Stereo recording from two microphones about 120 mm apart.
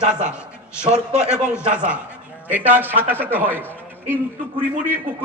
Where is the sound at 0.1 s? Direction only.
10° right (ahead or behind).